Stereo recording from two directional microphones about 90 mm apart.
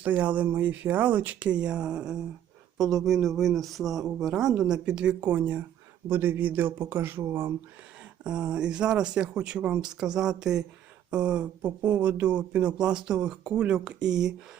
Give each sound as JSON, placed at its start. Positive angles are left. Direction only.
{"t": 0.0, "sound": "speech", "side_deg": -15}
{"t": 8.2, "sound": "speech", "side_deg": -10}